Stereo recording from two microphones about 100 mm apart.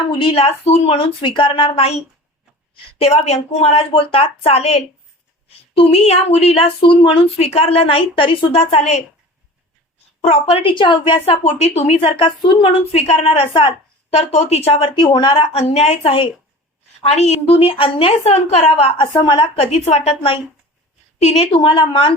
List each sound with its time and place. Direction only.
0.1 s a woman's voice: 65° left (ahead or behind); by 2.0 s 80° left
3.0 s a woman's voice: 90° left
10.2 s a woman's voice: 75° left (ahead or behind)
11.6 s a woman's voice: 90° left; by 12.7 s 55° left (ahead or behind)
12.9 s a woman's voice: 90° left; by 13.7 s 55° left (ahead or behind)
14.1 s a woman's voice: 90° left; by 15.0 s 65° left (ahead or behind)
15.0 s a woman's voice: 55° left (ahead or behind); by 16.3 s 70° left (ahead or behind)
17.1 s speech: 90° left
21.2 s a woman's voice: 90° left; by 22.1 s 60° left (ahead or behind)